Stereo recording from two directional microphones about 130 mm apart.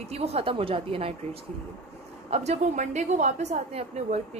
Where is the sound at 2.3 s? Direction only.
60° right (ahead or behind).